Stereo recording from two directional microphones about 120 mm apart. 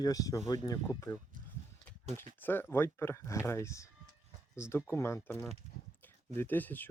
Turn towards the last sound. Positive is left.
turn(degrees=15)  # may be behind; listen again after turning